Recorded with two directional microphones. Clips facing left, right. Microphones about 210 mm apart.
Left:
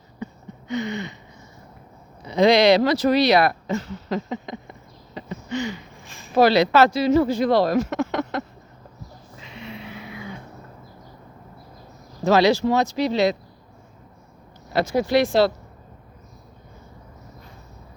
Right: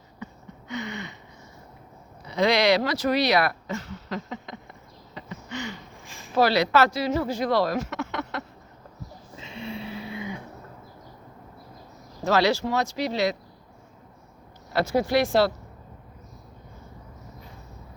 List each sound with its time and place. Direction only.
0.7 s speech: 20° left (ahead or behind)
2.2 s speech: 20° left (ahead or behind)
4.3 s a sound: 15° left (ahead or behind)
6.3 s speech: 20° left (ahead or behind); by 8.4 s 40° left (ahead or behind)
9.4 s vehicle: 30° right (ahead or behind)
12.2 s speech: 15° left (ahead or behind)
14.7 s speech: 15° left (ahead or behind)